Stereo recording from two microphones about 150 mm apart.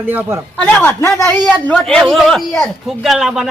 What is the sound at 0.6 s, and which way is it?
A man's voice, 10° left (ahead or behind).